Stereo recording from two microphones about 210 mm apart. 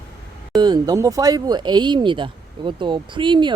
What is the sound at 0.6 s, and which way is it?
Speech, 20° right (ahead or behind).